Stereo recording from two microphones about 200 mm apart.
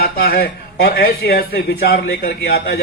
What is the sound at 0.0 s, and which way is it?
Speech, 50° left (ahead or behind).